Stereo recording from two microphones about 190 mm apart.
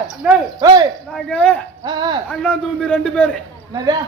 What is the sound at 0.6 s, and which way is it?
Speech, 20° right (ahead or behind).